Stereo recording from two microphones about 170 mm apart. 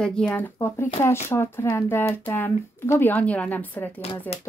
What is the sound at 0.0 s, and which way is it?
Speech, 5° left (ahead or behind).